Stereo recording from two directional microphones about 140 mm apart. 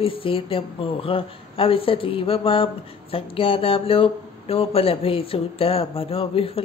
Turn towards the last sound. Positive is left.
turn(degrees=40)  # may be behind; listen again after turning